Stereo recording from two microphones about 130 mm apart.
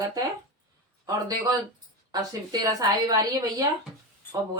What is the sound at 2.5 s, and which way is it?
Speech, 30° right (ahead or behind).